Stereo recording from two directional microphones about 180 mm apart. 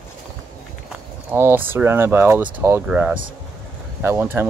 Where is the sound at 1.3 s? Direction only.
10° right (ahead or behind).